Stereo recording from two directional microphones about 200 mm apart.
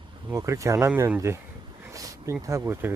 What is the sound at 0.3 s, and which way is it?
Speech, 15° right (ahead or behind).